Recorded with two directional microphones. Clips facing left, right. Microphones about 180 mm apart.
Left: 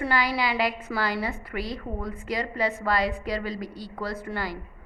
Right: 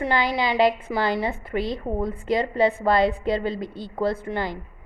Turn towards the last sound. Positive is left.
turn(degrees=-20)  # may be behind; listen again after turning